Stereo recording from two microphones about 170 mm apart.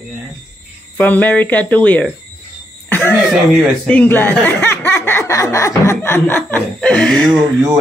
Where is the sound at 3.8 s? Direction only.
10° left (ahead or behind).